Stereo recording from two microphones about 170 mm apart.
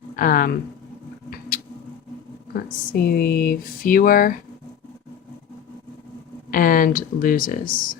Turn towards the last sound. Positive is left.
turn(degrees=55)  # may be behind; listen again after turning